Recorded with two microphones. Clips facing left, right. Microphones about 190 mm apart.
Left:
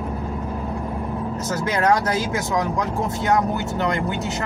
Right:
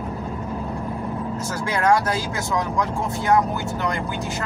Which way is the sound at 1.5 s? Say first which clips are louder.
Even; 20° left (ahead or behind).